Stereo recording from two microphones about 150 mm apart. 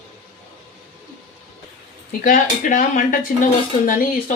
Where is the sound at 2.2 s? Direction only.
65° left (ahead or behind).